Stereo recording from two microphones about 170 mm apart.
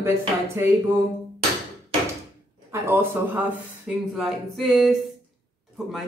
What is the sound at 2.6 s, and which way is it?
Speech, 15° right (ahead or behind).